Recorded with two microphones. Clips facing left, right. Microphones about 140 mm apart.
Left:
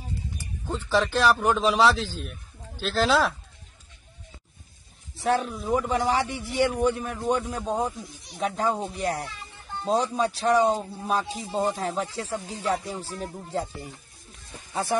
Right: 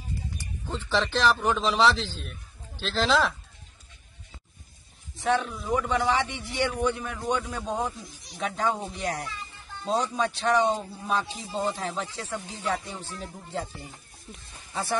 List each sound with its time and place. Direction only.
0.7 s a man's voice: 10° left (ahead or behind)
5.1 s speech: 35° left (ahead or behind)
7.4 s a man's voice: 10° left (ahead or behind)
9.0 s speech: 40° left (ahead or behind)
14.7 s speech: 15° left (ahead or behind)